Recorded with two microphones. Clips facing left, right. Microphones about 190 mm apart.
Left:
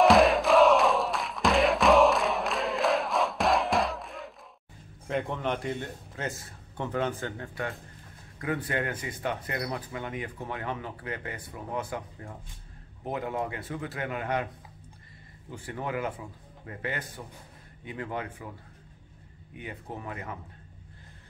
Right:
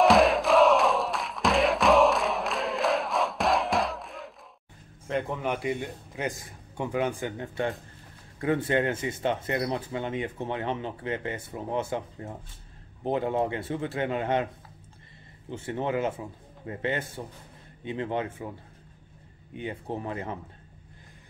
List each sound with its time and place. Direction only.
0.0 s crowd: centre (ahead or behind)
5.0 s a man's voice: centre (ahead or behind); by 14.5 s 25° right (ahead or behind)
15.5 s speech: 25° right (ahead or behind)
19.5 s speech: 25° right (ahead or behind)